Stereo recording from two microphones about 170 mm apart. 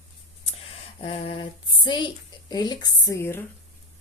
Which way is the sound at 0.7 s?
35° left (ahead or behind).